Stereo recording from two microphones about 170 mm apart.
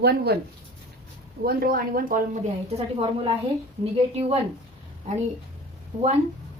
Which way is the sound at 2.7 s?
30° right (ahead or behind).